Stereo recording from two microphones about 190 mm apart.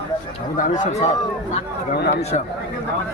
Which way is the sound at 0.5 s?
45° left (ahead or behind).